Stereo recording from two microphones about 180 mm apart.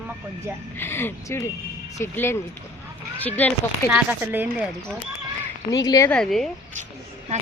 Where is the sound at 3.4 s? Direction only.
10° left (ahead or behind).